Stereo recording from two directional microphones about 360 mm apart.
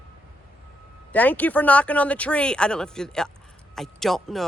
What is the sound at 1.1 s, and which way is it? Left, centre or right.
Speech, centre.